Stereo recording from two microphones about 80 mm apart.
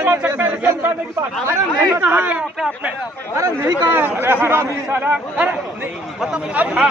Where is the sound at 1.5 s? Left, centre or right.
Right.